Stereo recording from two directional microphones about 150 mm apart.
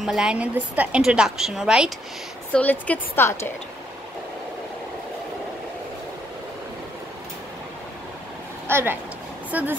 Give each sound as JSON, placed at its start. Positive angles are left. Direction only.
{"t": 0.0, "sound": "a woman's voice", "side_deg": -5}
{"t": 2.5, "sound": "speech", "side_deg": 10}
{"t": 8.6, "sound": "speech", "side_deg": -15}